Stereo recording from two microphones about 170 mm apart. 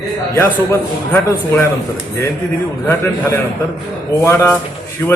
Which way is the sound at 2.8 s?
15° left (ahead or behind).